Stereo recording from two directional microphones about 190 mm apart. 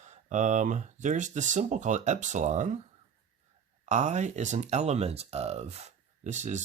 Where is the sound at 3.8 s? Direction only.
40° right (ahead or behind).